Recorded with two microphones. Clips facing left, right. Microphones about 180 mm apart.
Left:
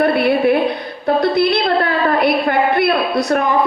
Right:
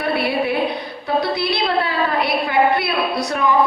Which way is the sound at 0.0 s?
50° left (ahead or behind).